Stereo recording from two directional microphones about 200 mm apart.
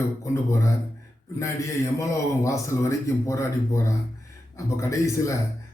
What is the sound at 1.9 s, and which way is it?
Speech, 15° left (ahead or behind).